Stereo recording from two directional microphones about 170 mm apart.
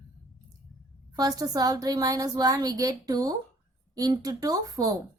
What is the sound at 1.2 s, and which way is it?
A woman's voice, 20° right (ahead or behind).